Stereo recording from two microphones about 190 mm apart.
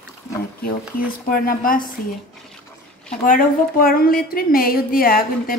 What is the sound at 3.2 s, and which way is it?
A woman's voice, 45° left (ahead or behind).